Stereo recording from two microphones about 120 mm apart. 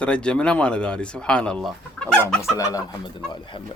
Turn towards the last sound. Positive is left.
turn(degrees=40)  # may be behind; listen again after turning